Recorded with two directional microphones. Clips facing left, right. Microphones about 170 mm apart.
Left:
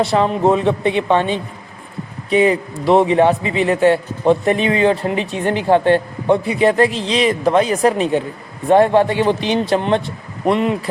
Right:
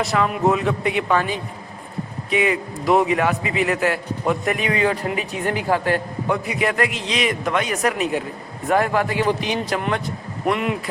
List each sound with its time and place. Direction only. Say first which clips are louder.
0.0 s a man's voice: left 5 dB; 30° left (ahead or behind)